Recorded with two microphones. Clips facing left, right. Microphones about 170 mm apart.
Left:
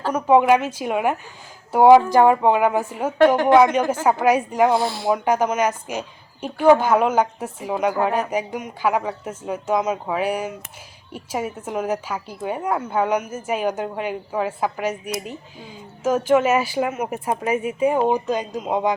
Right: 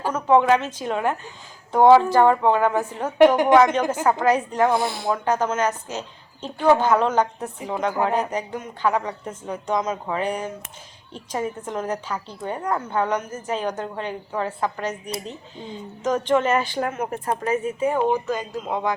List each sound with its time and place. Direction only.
0.1 s a woman's voice: 10° left (ahead or behind)